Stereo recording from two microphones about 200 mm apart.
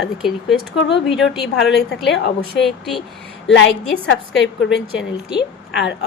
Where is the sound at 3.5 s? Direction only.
65° left (ahead or behind).